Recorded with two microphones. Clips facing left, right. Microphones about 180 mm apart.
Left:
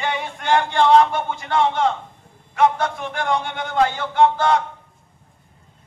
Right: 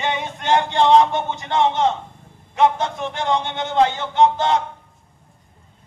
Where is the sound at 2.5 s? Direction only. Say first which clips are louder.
Even; 20° right (ahead or behind).